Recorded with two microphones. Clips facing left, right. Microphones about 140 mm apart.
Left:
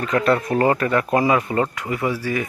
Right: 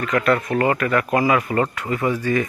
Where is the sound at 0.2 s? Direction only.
25° left (ahead or behind).